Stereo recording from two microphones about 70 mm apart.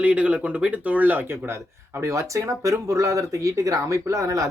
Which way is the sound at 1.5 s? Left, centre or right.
Right.